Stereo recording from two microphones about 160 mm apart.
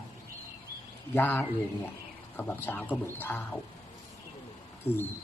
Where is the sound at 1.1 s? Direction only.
10° left (ahead or behind).